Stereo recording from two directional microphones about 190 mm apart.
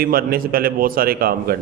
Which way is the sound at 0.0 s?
50° right (ahead or behind).